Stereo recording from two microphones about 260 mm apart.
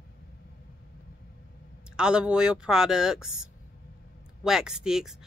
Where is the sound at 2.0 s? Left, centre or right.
Centre.